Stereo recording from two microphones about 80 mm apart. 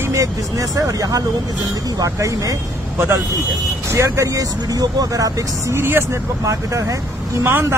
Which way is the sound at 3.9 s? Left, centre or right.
Right.